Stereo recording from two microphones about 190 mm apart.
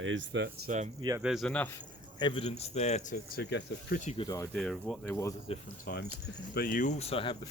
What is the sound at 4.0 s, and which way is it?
Speech, 35° left (ahead or behind).